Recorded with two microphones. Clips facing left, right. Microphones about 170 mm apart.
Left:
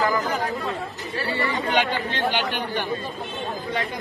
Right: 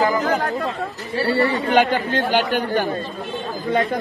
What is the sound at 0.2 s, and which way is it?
Speech, 70° right (ahead or behind).